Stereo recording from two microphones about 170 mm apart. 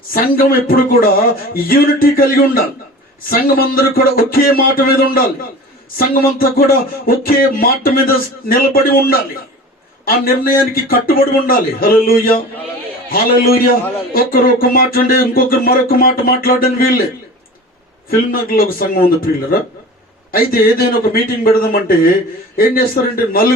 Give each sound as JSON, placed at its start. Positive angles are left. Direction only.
{"t": 0.1, "sound": "speech", "side_deg": 60}
{"t": 18.1, "sound": "speech", "side_deg": 60}